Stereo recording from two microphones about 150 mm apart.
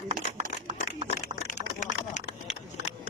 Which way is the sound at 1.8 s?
50° left (ahead or behind).